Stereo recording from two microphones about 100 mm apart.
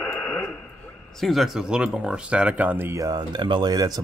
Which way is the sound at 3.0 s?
40° right (ahead or behind).